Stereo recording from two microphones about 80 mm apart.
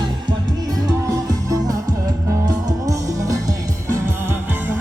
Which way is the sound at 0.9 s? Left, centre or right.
Right.